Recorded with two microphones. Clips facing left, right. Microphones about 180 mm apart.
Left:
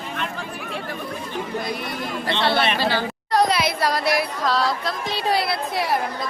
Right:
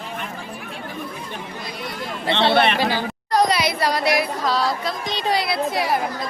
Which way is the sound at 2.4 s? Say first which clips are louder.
Right 4 dB; 25° right (ahead or behind).